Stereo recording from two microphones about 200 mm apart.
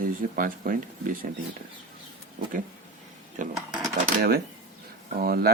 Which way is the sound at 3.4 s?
40° right (ahead or behind).